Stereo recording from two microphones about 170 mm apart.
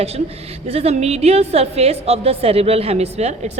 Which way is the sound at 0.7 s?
40° right (ahead or behind).